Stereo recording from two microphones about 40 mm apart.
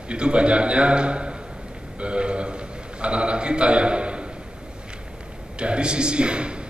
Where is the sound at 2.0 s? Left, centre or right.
Right.